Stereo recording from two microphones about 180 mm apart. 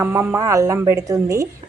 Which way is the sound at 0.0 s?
10° right (ahead or behind).